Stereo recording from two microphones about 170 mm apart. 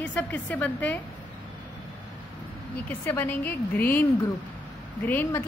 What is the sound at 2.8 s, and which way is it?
Speech, 10° left (ahead or behind).